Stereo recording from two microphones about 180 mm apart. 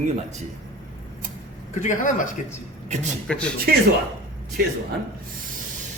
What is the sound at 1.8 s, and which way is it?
Speech, 45° left (ahead or behind).